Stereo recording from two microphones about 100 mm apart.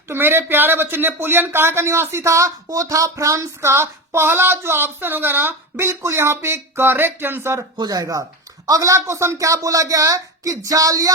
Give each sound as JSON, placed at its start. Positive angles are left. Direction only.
{"t": 0.1, "sound": "speech", "side_deg": -20}
{"t": 7.8, "sound": "speech", "side_deg": -40}